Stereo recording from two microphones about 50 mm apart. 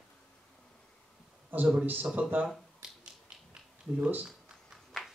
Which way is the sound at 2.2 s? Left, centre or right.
Right.